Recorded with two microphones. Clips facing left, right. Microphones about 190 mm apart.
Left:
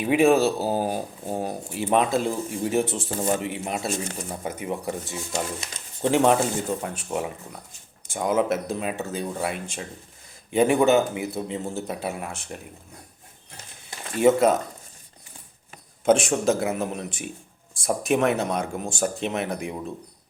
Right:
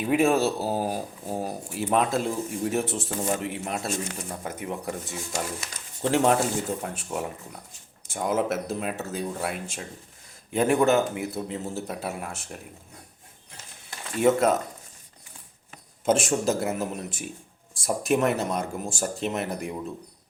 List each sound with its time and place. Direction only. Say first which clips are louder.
0.0 s speech: left 3 dB; centre (ahead or behind)
5.3 s speech: left 3 dB; 25° left (ahead or behind)
6.1 s speech: left 2 dB; centre (ahead or behind)
14.2 s speech: left 3 dB; centre (ahead or behind)
16.0 s speech: left 3 dB; centre (ahead or behind)